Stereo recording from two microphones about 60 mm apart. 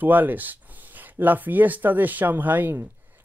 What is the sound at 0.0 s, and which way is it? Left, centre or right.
Speech, right.